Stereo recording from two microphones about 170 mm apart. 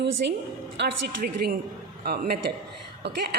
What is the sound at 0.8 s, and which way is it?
A woman's voice, 65° right (ahead or behind).